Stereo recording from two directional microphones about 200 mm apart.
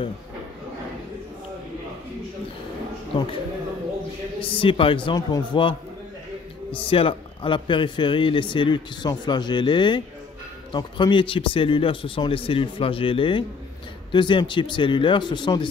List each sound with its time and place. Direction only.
3.1 s speech: 25° left (ahead or behind)
4.4 s speech: 25° left (ahead or behind)
6.8 s speech: 25° left (ahead or behind)